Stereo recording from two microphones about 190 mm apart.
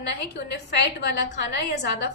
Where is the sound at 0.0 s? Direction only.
65° left (ahead or behind).